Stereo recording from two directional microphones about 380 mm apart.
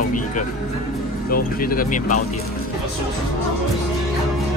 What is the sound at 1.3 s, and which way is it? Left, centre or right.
Speech, left.